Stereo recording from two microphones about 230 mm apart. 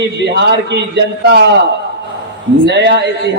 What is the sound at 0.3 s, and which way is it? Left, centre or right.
A man's voice, right.